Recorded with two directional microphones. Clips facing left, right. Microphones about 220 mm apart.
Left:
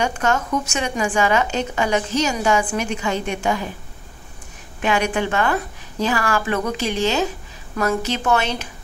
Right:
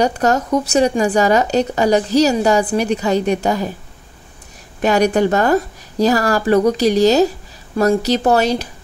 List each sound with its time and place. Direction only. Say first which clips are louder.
0.0 s a woman's voice: right 5 dB; 35° right (ahead or behind)
4.8 s a woman's voice: right 7 dB; 40° right (ahead or behind)